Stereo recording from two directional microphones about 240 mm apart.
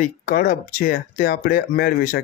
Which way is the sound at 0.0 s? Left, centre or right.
Left.